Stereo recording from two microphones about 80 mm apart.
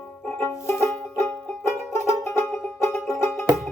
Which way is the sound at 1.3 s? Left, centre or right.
Centre.